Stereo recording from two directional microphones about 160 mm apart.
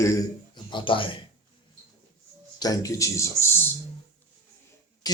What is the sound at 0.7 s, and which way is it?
Speech, 30° left (ahead or behind).